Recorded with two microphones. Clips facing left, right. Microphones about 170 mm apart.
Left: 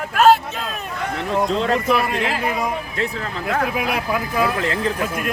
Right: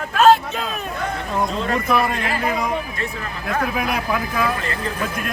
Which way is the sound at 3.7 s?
5° left (ahead or behind).